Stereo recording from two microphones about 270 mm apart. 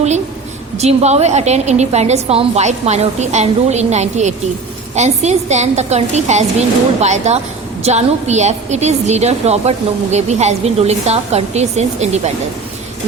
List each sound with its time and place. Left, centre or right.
0.8 s a woman's voice: right